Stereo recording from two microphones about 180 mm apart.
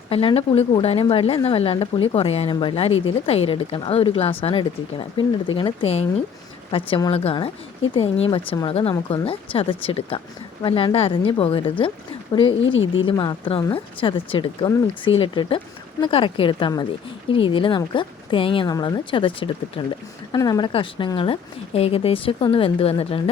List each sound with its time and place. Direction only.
0.1 s a woman's voice: 30° left (ahead or behind)
12.5 s speech: 90° left
13.1 s a woman's voice: 25° left (ahead or behind)